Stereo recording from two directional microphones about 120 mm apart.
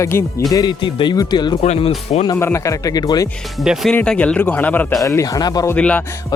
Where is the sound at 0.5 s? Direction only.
35° left (ahead or behind).